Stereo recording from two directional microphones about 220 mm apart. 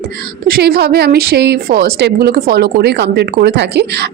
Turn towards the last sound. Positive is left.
turn(degrees=-50)  # may be behind; listen again after turning